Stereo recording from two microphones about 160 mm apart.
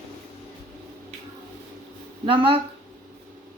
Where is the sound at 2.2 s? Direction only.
35° right (ahead or behind).